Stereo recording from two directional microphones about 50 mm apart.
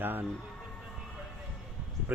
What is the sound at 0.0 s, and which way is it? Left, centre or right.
Speech, right.